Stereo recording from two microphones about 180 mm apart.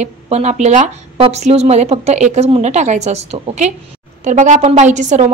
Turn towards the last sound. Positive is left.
turn(degrees=-40)  # may be behind; listen again after turning